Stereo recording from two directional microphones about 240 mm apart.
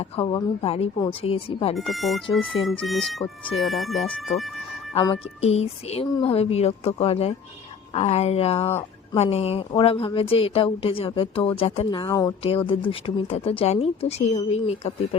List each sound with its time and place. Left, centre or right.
0.0 s speech: left
1.7 s speech: centre
4.9 s speech: left